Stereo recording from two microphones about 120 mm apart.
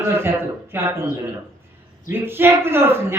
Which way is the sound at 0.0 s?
20° right (ahead or behind).